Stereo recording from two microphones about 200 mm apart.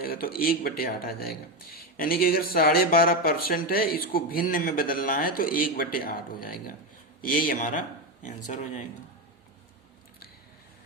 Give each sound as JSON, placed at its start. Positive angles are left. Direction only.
{"t": 0.0, "sound": "speech", "side_deg": 50}